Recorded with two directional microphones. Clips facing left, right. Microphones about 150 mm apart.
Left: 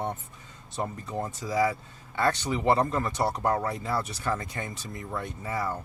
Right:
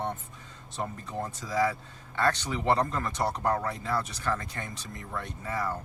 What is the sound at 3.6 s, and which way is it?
Speech, 5° left (ahead or behind).